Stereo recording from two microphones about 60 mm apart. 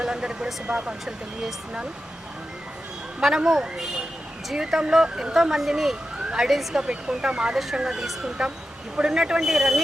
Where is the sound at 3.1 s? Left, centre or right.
Centre.